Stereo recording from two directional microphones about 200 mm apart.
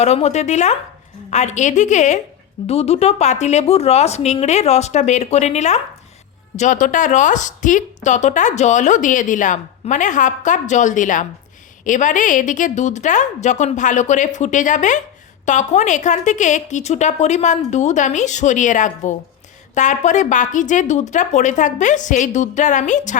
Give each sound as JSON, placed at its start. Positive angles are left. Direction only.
{"t": 0.0, "sound": "a woman's voice", "side_deg": 30}